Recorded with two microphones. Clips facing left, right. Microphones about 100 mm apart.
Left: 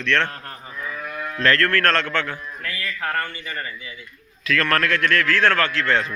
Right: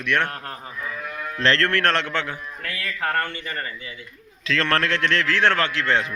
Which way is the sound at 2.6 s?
65° right (ahead or behind).